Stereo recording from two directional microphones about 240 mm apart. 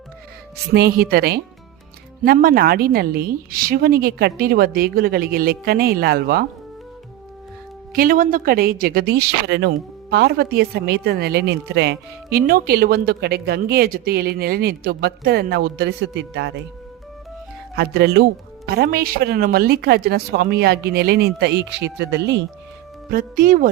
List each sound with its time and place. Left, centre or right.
0.7 s speech: right
7.9 s speech: right
17.7 s speech: right
23.0 s speech: right